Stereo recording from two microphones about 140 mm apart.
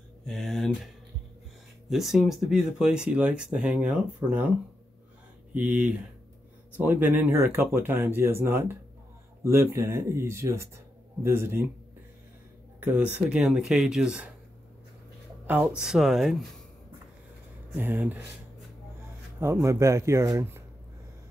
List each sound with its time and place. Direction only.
0.2 s speech: 5° left (ahead or behind)
1.9 s speech: centre (ahead or behind)
5.5 s speech: 10° right (ahead or behind)
12.8 s speech: 10° right (ahead or behind)
15.4 s speech: 10° right (ahead or behind)
17.7 s speech: 15° right (ahead or behind)
19.4 s speech: 20° right (ahead or behind)